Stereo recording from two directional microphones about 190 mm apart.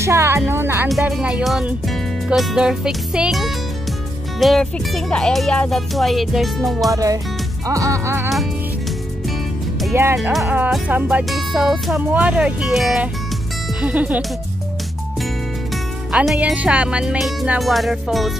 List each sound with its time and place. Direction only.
0.0 s music: 15° right (ahead or behind)
0.8 s speech: centre (ahead or behind)
6.9 s music: 15° right (ahead or behind)
10.1 s speech: centre (ahead or behind)
13.7 s music: 5° right (ahead or behind)
16.1 s speech: 5° right (ahead or behind)